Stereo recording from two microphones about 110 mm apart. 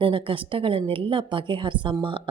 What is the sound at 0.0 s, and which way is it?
Speech, 55° right (ahead or behind).